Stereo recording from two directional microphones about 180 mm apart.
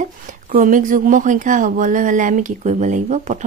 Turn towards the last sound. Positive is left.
turn(degrees=-40)  # may be behind; listen again after turning